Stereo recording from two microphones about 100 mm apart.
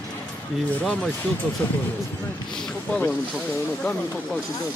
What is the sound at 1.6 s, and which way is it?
Speech, 20° left (ahead or behind).